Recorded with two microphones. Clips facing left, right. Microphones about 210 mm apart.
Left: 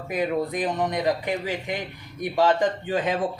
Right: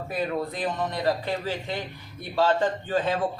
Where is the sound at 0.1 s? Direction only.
15° left (ahead or behind).